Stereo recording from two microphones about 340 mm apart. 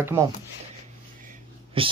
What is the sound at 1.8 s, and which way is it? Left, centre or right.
Speech, centre.